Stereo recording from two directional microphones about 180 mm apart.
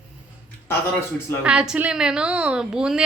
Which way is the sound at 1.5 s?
5° right (ahead or behind).